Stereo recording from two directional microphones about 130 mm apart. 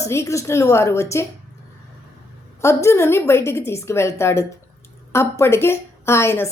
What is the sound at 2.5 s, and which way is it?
A woman's voice, 20° left (ahead or behind).